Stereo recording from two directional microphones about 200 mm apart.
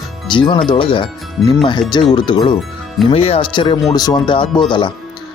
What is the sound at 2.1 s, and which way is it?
Speech, 20° left (ahead or behind).